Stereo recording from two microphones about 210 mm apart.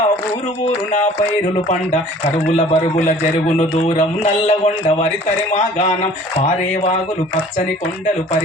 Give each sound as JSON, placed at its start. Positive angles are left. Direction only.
{"t": 2.6, "sound": "a man's voice", "side_deg": 30}